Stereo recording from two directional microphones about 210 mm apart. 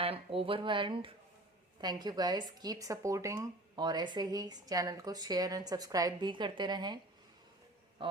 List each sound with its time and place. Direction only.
0.0 s speech: 25° right (ahead or behind)